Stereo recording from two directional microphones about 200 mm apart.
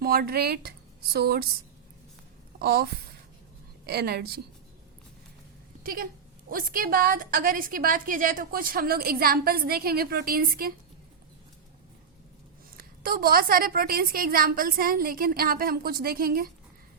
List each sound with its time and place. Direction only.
0.0 s a woman's voice: 50° right (ahead or behind)
2.6 s a woman's voice: 50° right (ahead or behind)
5.8 s a woman's voice: 45° right (ahead or behind)
12.7 s a woman's voice: 50° right (ahead or behind)